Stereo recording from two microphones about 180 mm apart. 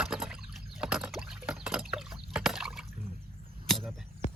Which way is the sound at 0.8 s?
5° right (ahead or behind).